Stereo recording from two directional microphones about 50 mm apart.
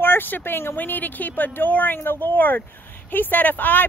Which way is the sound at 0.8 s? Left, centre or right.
Left.